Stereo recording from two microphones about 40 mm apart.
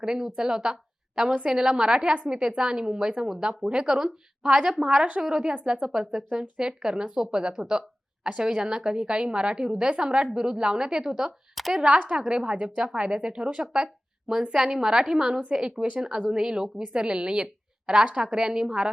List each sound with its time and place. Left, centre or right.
0.0 s a woman's voice: centre
5.5 s a woman's voice: right
5.8 s speech: centre
11.6 s speech: centre
11.9 s a woman's voice: right